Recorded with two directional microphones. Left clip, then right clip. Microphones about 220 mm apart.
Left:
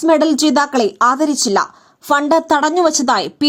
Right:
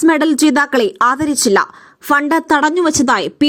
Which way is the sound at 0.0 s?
20° right (ahead or behind).